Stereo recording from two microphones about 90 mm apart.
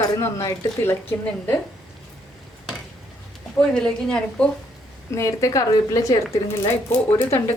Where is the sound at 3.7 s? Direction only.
10° left (ahead or behind).